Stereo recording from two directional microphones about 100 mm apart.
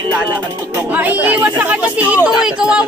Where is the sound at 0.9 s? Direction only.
15° right (ahead or behind).